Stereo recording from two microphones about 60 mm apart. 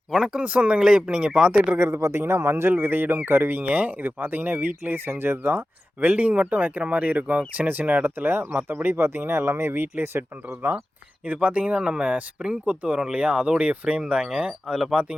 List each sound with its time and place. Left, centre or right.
0.3 s speech: right
1.9 s speech: right
6.0 s speech: right
11.3 s speech: right; by 14.9 s centre